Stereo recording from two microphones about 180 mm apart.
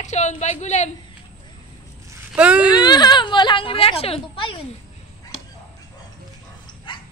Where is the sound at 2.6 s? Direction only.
25° left (ahead or behind).